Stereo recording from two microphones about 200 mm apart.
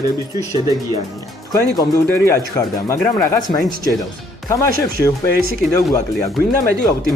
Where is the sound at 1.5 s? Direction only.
15° left (ahead or behind).